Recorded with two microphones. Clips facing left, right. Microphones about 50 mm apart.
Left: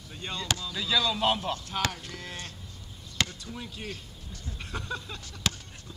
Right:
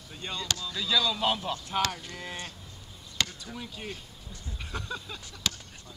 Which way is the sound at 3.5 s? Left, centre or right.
Centre.